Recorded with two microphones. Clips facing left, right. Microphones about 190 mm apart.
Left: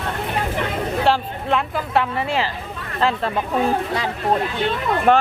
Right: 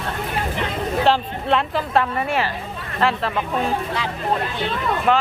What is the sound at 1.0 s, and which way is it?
Speech, 10° left (ahead or behind).